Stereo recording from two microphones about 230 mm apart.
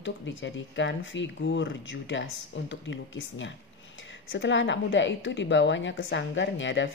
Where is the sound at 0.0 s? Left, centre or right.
Left.